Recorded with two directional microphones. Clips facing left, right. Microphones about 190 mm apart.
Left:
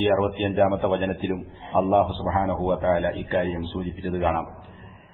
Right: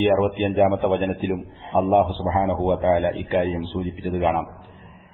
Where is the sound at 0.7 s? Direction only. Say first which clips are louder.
Right 2 dB; centre (ahead or behind).